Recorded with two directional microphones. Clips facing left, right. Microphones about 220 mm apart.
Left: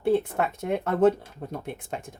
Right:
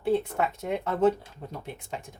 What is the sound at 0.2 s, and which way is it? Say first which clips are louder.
Speech: left 1 dB; 55° left (ahead or behind).